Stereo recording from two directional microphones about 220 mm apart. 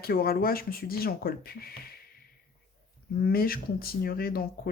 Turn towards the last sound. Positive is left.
turn(degrees=45)  # may be behind; listen again after turning